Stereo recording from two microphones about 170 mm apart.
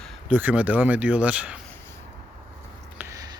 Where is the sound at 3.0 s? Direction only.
20° right (ahead or behind).